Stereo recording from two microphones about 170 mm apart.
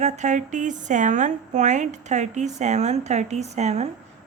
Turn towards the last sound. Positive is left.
turn(degrees=-40)  # may be behind; listen again after turning